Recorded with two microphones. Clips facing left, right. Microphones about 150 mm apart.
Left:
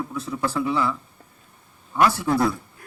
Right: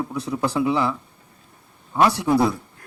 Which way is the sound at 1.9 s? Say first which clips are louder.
Right 2 dB; 20° right (ahead or behind).